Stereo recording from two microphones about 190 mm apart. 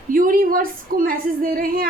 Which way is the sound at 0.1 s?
45° right (ahead or behind).